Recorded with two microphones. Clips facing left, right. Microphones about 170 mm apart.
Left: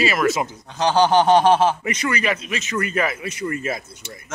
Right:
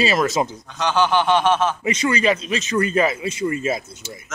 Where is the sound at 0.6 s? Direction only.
30° left (ahead or behind).